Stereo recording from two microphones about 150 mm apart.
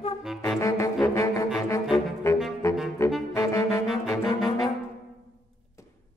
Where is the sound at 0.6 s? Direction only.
20° left (ahead or behind).